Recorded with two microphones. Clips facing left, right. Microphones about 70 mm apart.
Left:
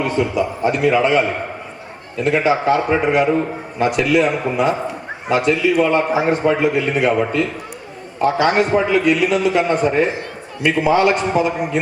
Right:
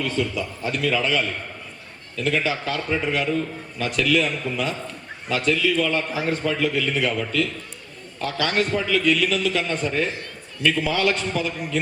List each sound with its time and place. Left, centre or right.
0.0 s a man's voice: left